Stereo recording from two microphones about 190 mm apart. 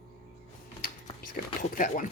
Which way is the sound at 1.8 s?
45° left (ahead or behind).